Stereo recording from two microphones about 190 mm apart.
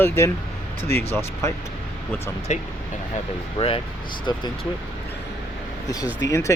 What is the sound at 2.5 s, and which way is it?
Speech, 35° left (ahead or behind).